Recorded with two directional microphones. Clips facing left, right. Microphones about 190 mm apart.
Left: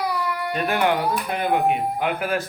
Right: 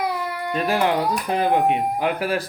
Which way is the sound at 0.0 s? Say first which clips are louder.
Even; 25° right (ahead or behind).